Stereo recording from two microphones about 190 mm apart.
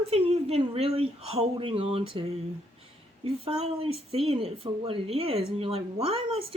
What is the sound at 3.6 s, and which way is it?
Speech, 30° right (ahead or behind).